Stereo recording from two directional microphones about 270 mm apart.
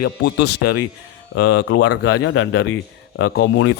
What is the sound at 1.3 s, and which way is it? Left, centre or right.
Speech, left.